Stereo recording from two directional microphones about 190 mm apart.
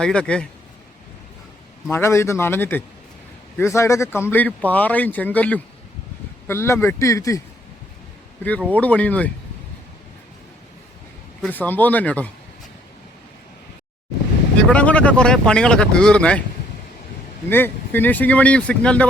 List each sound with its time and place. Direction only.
0.0 s speech: 5° left (ahead or behind)
1.9 s speech: 15° left (ahead or behind)
8.7 s speech: 5° left (ahead or behind)
11.4 s speech: 10° left (ahead or behind)
14.7 s speech: 5° left (ahead or behind)
17.5 s speech: 10° left (ahead or behind)